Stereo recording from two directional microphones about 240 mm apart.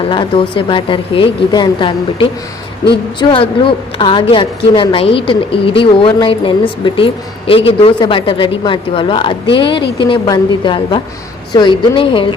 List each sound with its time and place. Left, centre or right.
0.1 s a woman's voice: centre